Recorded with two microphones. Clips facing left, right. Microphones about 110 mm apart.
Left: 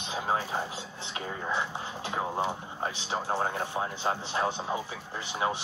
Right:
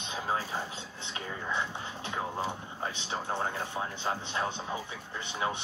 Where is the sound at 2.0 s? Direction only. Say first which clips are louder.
Left 4 dB; 30° left (ahead or behind).